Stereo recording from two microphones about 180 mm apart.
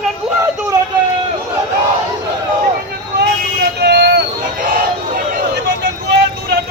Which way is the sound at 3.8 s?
65° right (ahead or behind).